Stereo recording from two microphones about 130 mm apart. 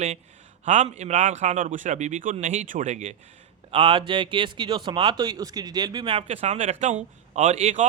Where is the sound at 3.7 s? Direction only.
40° right (ahead or behind).